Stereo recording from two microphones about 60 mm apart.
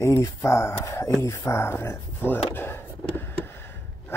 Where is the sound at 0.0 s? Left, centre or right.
Left.